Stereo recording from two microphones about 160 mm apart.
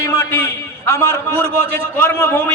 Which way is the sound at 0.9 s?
15° left (ahead or behind).